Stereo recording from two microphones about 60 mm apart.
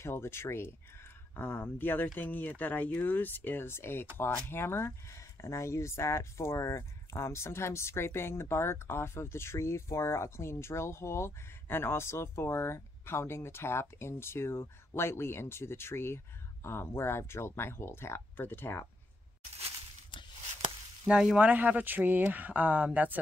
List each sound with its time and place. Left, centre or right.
0.0 s speech: left
21.1 s speech: centre
21.5 s speech: right